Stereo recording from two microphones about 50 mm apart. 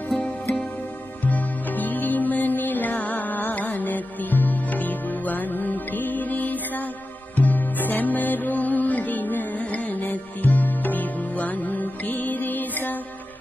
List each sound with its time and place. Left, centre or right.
0.2 s music: left